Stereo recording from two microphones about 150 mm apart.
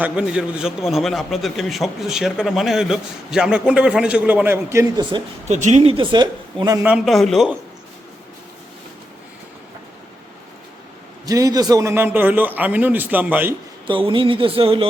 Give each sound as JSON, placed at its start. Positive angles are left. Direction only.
{"t": 0.0, "sound": "a man's voice", "side_deg": -5}
{"t": 5.1, "sound": "speech", "side_deg": -30}
{"t": 5.5, "sound": "speech", "side_deg": -50}
{"t": 6.8, "sound": "a man's voice", "side_deg": -5}
{"t": 11.3, "sound": "a man's voice", "side_deg": -25}
{"t": 13.8, "sound": "speech", "side_deg": -35}